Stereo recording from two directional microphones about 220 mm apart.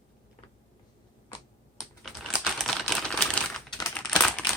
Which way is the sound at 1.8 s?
Centre (ahead or behind).